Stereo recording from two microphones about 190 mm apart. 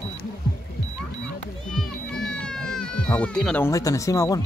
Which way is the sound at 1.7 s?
Centre (ahead or behind).